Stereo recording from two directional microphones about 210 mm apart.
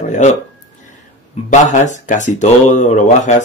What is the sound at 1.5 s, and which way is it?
Speech, 35° left (ahead or behind).